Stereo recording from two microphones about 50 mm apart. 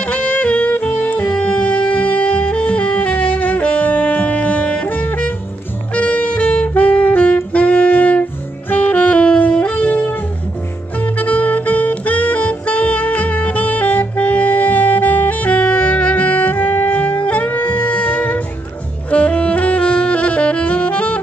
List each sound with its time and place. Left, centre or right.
0.0 s music: left
5.9 s saxophone: left
9.4 s wind instrument: left
11.0 s saxophone: left